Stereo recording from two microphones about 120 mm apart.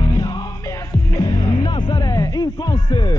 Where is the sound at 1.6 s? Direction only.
40° left (ahead or behind).